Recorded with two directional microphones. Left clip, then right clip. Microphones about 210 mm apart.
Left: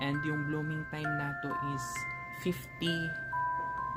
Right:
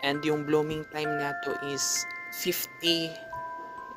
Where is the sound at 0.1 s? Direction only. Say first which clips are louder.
Right 8 dB; 40° right (ahead or behind).